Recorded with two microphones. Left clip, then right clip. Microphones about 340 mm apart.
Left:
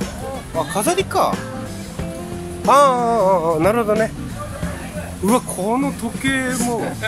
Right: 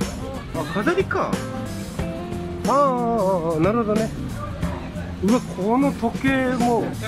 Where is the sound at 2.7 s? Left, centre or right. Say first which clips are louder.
Left 6 dB; left.